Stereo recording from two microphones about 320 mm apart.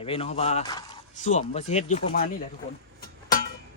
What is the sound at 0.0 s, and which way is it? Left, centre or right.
Speech, centre.